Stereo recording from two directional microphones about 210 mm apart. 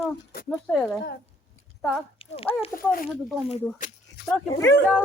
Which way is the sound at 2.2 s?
25° left (ahead or behind).